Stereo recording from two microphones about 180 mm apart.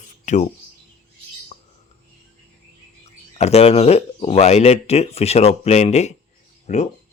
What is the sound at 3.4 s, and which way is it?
Speech, 35° left (ahead or behind).